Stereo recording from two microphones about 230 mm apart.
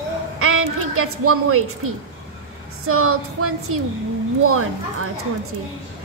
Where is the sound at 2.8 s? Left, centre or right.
Right.